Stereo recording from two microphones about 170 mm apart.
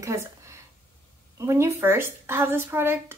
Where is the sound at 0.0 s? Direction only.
15° right (ahead or behind).